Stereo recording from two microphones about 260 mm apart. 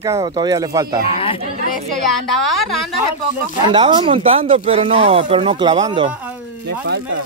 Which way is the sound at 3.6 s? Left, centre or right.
Centre.